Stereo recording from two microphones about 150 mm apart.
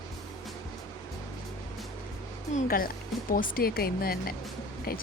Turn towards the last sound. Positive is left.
turn(degrees=85)